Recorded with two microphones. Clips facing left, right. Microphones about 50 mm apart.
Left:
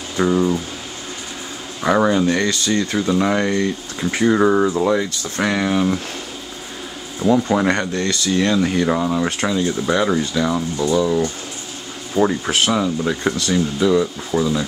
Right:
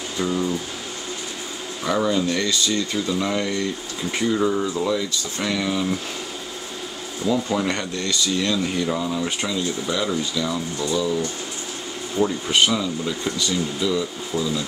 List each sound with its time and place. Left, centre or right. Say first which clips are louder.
0.3 s speech: left 6 dB; centre
1.9 s speech: left 5 dB; left
7.2 s speech: left 6 dB; centre
7.5 s speech: left 6 dB; left
12.2 s speech: left 2 dB; left
12.7 s speech: left 5 dB; left